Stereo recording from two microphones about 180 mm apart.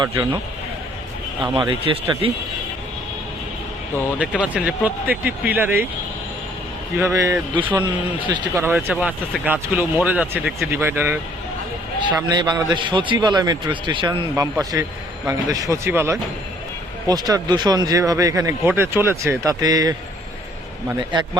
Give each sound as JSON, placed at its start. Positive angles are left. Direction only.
{"t": 0.0, "sound": "speech", "side_deg": -15}
{"t": 1.5, "sound": "speech", "side_deg": -30}
{"t": 4.2, "sound": "speech", "side_deg": -5}
{"t": 7.0, "sound": "speech", "side_deg": -20}
{"t": 12.0, "sound": "speech", "side_deg": -25}